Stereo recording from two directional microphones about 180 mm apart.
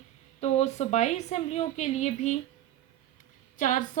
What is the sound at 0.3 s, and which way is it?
Speech, 35° left (ahead or behind).